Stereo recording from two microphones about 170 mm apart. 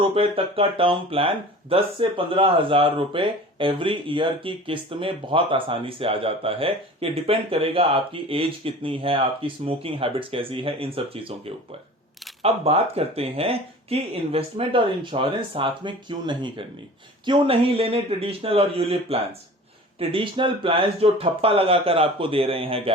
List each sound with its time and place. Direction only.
0.0 s speech: 30° right (ahead or behind)